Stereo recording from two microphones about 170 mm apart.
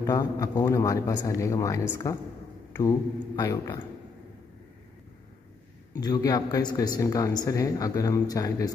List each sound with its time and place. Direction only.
0.0 s speech: 20° left (ahead or behind)
3.3 s a man's voice: 20° left (ahead or behind)
5.9 s speech: 25° left (ahead or behind)